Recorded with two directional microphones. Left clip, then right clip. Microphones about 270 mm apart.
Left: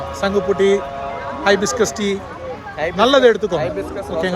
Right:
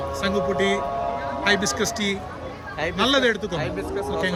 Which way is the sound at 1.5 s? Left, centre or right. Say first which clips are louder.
Left 7 dB; centre.